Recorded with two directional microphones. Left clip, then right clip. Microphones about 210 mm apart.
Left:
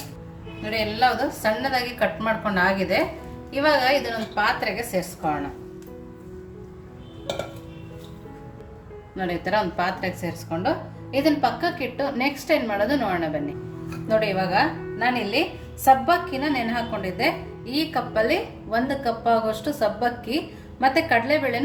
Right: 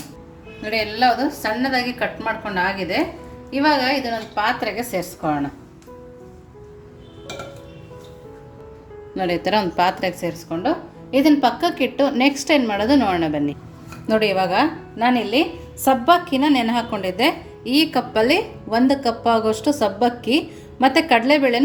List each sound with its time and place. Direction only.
0.6 s a woman's voice: 35° right (ahead or behind)
9.1 s a woman's voice: 40° right (ahead or behind)